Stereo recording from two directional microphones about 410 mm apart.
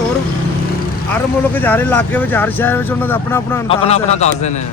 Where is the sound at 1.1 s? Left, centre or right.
Centre.